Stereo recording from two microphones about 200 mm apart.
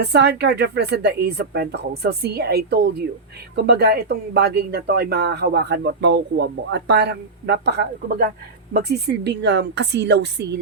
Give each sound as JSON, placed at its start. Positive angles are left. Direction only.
{"t": 0.0, "sound": "speech", "side_deg": -60}